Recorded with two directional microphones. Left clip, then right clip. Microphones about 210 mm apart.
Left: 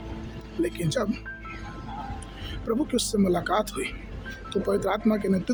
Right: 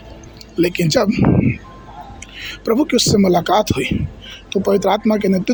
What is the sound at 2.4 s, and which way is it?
Speech, 35° right (ahead or behind).